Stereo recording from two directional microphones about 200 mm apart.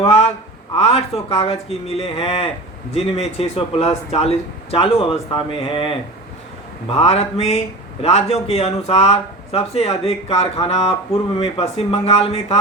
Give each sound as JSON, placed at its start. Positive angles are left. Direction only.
{"t": 0.0, "sound": "speech", "side_deg": 30}